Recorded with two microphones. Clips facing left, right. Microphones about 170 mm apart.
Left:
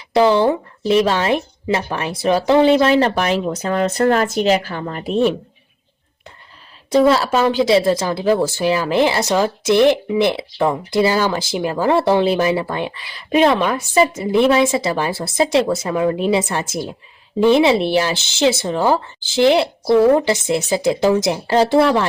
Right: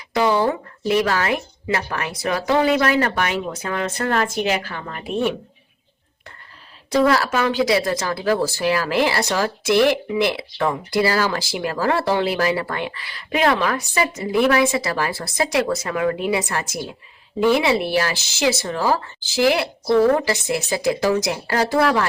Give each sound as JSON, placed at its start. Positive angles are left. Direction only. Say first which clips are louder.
{"t": 0.1, "sound": "a woman's voice", "louder": "left 5 dB", "side_deg": 30}
{"t": 6.9, "sound": "a woman's voice", "louder": "left 4 dB", "side_deg": 25}